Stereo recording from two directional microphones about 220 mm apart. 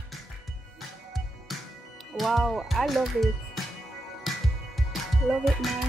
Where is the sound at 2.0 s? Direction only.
Centre (ahead or behind).